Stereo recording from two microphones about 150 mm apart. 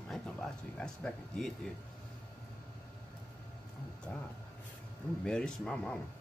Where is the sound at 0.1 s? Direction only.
5° left (ahead or behind).